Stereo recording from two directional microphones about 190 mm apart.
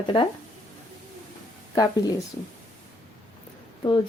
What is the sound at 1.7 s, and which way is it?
Speech, 20° left (ahead or behind).